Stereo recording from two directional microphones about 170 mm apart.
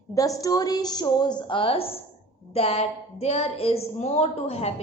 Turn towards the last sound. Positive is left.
turn(degrees=35)  # may be behind; listen again after turning